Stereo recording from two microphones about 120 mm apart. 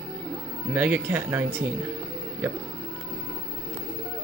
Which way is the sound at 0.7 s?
10° right (ahead or behind).